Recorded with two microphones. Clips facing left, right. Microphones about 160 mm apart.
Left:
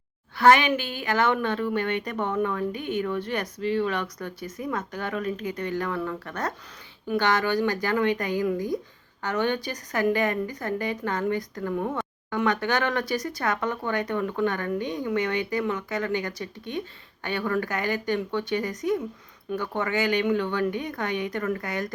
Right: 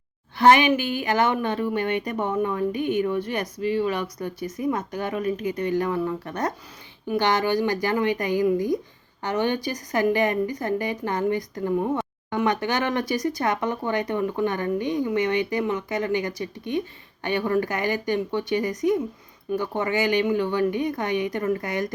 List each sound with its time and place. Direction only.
0.3 s speech: 20° right (ahead or behind)